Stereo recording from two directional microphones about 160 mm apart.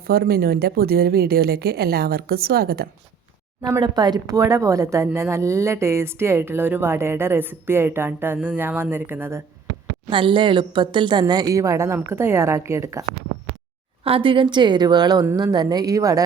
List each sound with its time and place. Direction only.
0.1 s speech: 70° right (ahead or behind)
3.6 s speech: 25° right (ahead or behind)
10.1 s a woman's voice: 30° right (ahead or behind)
14.0 s a woman's voice: 35° right (ahead or behind)